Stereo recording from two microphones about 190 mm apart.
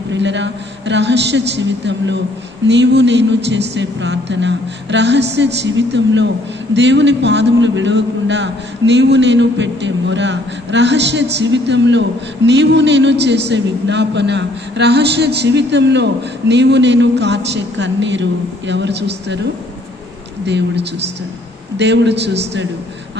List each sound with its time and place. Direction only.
0.1 s a man's voice: 70° right (ahead or behind)
20.4 s a man's voice: 65° right (ahead or behind)